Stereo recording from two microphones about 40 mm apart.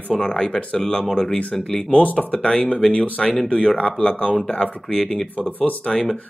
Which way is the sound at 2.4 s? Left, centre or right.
Left.